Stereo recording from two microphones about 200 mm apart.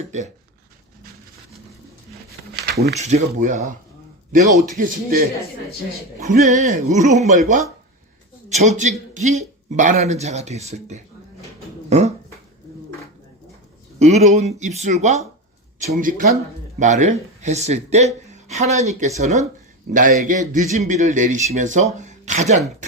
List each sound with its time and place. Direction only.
2.6 s a sound: 50° right (ahead or behind)
2.9 s speech: 35° right (ahead or behind)
6.2 s speech: 40° right (ahead or behind)
11.9 s dog: 35° right (ahead or behind)
14.0 s speech: 35° right (ahead or behind)
22.0 s a sound: 35° right (ahead or behind)